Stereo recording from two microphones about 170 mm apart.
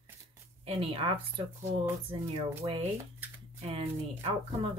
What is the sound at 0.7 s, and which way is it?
Speech, 35° right (ahead or behind).